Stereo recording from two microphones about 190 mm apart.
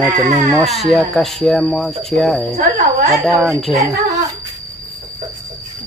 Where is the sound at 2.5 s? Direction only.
40° right (ahead or behind).